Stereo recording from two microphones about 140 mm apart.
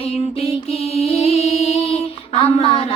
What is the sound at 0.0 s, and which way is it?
Music, 50° left (ahead or behind).